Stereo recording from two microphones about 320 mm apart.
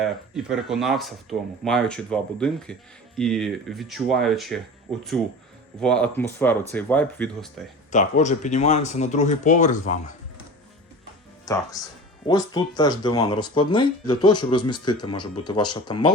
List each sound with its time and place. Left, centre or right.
0.0 s speech: centre
5.8 s speech: centre
7.9 s speech: left
11.4 s speech: centre